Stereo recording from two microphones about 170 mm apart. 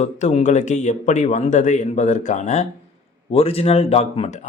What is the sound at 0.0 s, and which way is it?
Speech, 45° left (ahead or behind).